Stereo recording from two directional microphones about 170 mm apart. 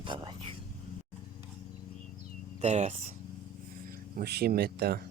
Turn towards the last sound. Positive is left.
turn(degrees=-65)  # may be behind; listen again after turning